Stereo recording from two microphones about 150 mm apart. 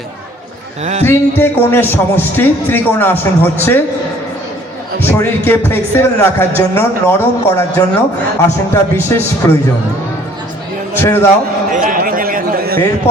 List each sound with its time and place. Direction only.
1.0 s speech: 15° left (ahead or behind)
5.0 s speech: 15° left (ahead or behind)
10.9 s speech: 15° left (ahead or behind)
11.7 s a sound: 65° right (ahead or behind); by 12.8 s 80° right